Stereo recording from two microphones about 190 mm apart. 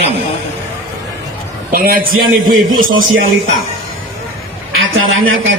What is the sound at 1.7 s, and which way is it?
Speech, 50° right (ahead or behind).